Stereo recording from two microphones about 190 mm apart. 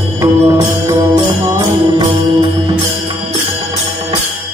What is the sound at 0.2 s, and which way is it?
Music, 15° right (ahead or behind).